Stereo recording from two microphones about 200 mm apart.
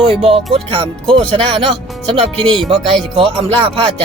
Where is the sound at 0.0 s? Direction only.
30° right (ahead or behind).